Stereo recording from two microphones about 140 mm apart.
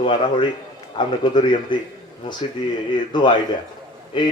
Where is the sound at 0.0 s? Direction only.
35° left (ahead or behind).